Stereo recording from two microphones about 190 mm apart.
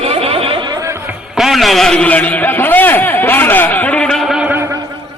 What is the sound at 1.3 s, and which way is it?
A man's voice, centre (ahead or behind).